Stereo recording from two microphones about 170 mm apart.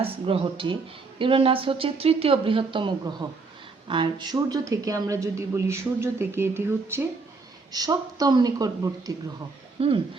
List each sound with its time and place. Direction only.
0.0 s a woman's voice: 35° right (ahead or behind)
9.8 s speech: 35° right (ahead or behind)